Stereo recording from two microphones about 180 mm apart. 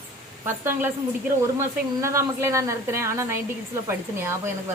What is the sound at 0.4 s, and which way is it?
Speech, 10° right (ahead or behind).